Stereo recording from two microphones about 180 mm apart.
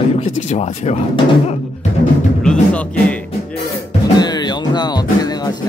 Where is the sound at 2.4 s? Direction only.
5° left (ahead or behind).